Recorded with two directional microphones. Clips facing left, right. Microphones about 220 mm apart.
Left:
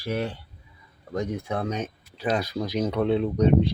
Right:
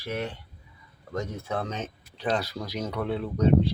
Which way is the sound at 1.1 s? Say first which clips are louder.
Left 3 dB; 15° left (ahead or behind).